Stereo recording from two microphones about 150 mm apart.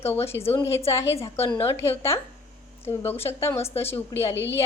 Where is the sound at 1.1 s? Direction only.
40° left (ahead or behind).